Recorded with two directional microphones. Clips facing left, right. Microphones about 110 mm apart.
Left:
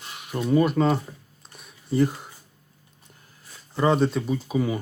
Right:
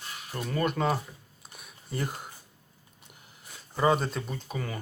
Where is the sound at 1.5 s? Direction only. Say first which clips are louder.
Left 12 dB; centre (ahead or behind).